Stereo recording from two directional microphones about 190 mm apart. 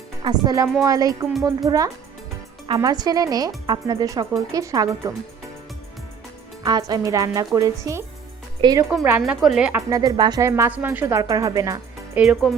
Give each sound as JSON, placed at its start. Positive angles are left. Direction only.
{"t": 0.3, "sound": "speech", "side_deg": -20}
{"t": 6.7, "sound": "speech", "side_deg": -20}
{"t": 9.9, "sound": "speech", "side_deg": -20}
{"t": 12.1, "sound": "speech", "side_deg": -5}